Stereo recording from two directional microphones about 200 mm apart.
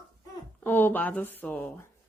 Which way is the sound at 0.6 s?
10° left (ahead or behind).